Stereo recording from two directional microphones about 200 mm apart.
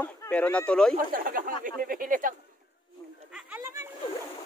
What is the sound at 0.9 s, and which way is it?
Speech, 45° right (ahead or behind).